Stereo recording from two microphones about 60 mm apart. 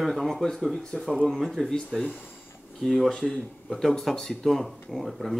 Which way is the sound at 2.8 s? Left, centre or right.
Centre.